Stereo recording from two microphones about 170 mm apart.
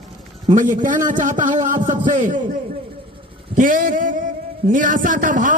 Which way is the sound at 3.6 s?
55° right (ahead or behind).